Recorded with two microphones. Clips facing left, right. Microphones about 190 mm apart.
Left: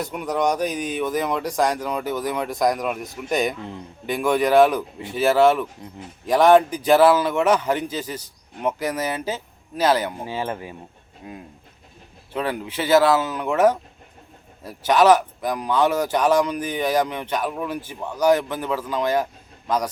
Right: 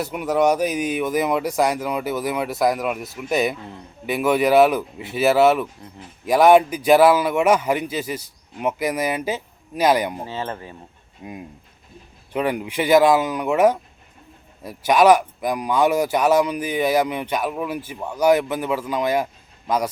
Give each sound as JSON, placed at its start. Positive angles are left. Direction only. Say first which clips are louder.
{"t": 0.0, "sound": "speech", "louder": "right 4 dB", "side_deg": -5}
{"t": 10.2, "sound": "speech", "louder": "left 2 dB", "side_deg": 10}
{"t": 12.3, "sound": "speech", "louder": "right 3 dB", "side_deg": -15}